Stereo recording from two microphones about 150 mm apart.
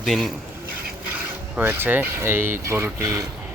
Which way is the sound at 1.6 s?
15° right (ahead or behind).